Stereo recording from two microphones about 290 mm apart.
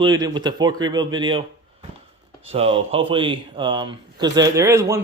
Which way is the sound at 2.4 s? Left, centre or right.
Centre.